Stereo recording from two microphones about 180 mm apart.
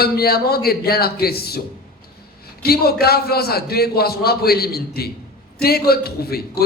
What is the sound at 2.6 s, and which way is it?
A man's voice, 60° left (ahead or behind).